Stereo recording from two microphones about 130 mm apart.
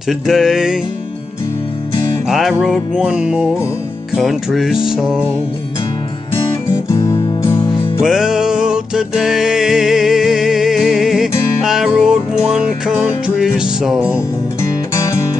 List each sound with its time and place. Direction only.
0.3 s music: 5° right (ahead or behind)
2.2 s music: centre (ahead or behind)
6.9 s music: 25° left (ahead or behind)
8.0 s music: 5° right (ahead or behind)